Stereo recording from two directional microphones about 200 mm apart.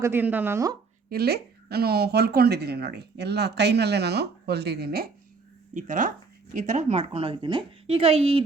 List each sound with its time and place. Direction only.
0.0 s speech: 10° right (ahead or behind)
1.1 s speech: 50° right (ahead or behind)
5.7 s a woman's voice: 40° right (ahead or behind)